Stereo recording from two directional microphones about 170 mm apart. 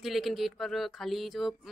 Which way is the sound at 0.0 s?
Centre (ahead or behind).